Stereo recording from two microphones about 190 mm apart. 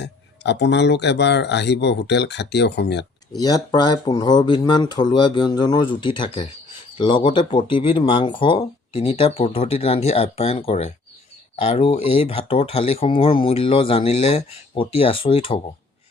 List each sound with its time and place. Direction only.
0.0 s speech: 65° left (ahead or behind)
3.3 s speech: 20° left (ahead or behind)